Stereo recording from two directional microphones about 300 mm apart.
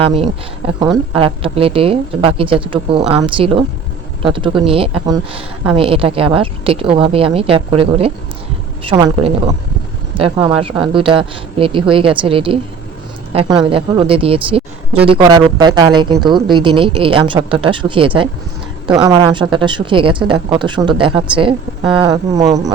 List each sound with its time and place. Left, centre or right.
0.2 s speech: centre